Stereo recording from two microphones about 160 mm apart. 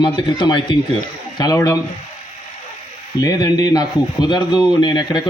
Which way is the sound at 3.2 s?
25° left (ahead or behind).